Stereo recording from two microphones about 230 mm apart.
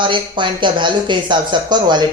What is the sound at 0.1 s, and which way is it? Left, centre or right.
Speech, right.